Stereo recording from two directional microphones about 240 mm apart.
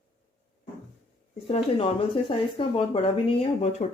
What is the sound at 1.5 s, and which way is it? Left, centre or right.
Speech, left.